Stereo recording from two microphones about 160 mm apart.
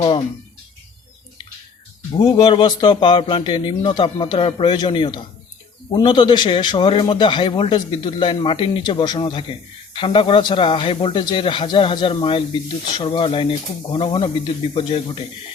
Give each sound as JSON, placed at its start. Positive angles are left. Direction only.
{"t": 2.1, "sound": "a man's voice", "side_deg": 30}